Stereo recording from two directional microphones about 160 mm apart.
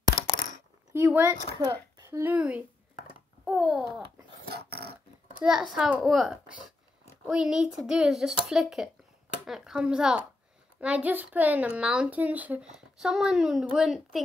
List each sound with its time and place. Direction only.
0.9 s a child's voice: 15° right (ahead or behind)
4.5 s a sound: 85° right
5.4 s a child's voice: 5° right (ahead or behind)